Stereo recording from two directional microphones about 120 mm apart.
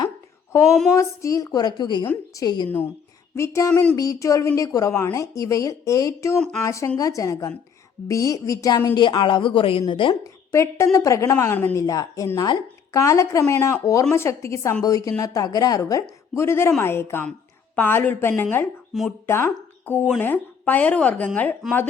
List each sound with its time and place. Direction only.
0.9 s a woman's voice: 25° left (ahead or behind)
2.6 s a woman's voice: 15° left (ahead or behind)
3.7 s speech: 15° left (ahead or behind)
3.9 s a woman's voice: 25° left (ahead or behind)
9.0 s speech: 40° left (ahead or behind)
10.5 s a woman's voice: 25° left (ahead or behind)